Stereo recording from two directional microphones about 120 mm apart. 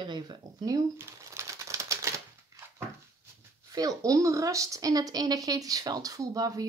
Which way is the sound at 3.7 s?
30° right (ahead or behind).